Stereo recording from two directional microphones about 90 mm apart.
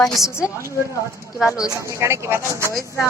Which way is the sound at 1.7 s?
35° right (ahead or behind).